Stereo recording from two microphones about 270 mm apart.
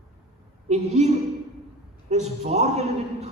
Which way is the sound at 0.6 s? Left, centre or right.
Right.